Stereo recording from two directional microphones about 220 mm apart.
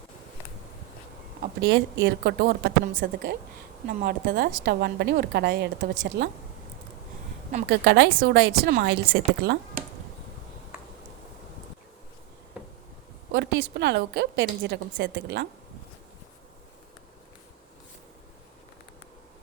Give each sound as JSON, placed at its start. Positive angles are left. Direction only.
{"t": 1.4, "sound": "a woman's voice", "side_deg": -50}
{"t": 7.7, "sound": "a woman's voice", "side_deg": -55}
{"t": 12.6, "sound": "a sound", "side_deg": -5}
{"t": 13.3, "sound": "a woman's voice", "side_deg": -50}